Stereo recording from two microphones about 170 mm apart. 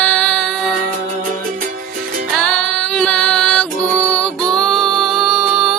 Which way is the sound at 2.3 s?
5° left (ahead or behind).